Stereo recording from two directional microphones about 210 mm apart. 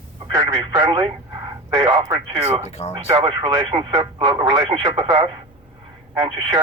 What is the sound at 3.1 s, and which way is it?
Speech, 25° right (ahead or behind).